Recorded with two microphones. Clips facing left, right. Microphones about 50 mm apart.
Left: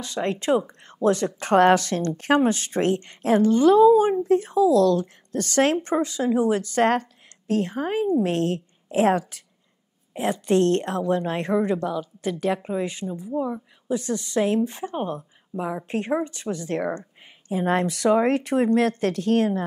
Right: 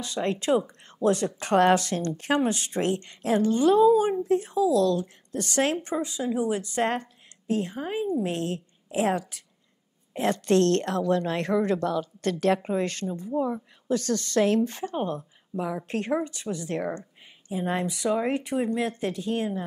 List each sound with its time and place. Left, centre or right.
0.0 s a woman's voice: left
10.1 s a woman's voice: centre
16.3 s speech: left
17.5 s a woman's voice: left